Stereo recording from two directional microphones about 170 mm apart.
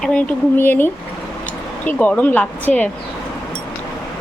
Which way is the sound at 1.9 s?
10° left (ahead or behind).